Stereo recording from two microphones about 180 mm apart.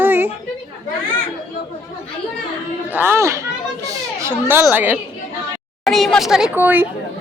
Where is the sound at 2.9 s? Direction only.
10° right (ahead or behind).